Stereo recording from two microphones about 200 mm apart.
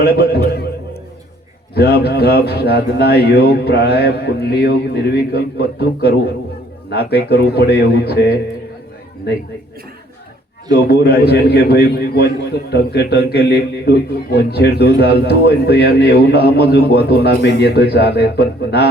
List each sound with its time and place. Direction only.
0.0 s a man's voice: 55° left (ahead or behind)
1.7 s a man's voice: 55° left (ahead or behind)
10.7 s a man's voice: 55° left (ahead or behind)